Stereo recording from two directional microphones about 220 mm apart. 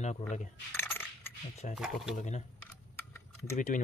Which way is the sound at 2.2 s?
30° left (ahead or behind).